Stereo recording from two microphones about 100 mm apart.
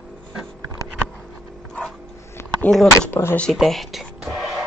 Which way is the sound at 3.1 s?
25° left (ahead or behind).